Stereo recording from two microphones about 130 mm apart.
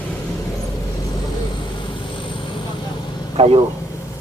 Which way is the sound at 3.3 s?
50° right (ahead or behind).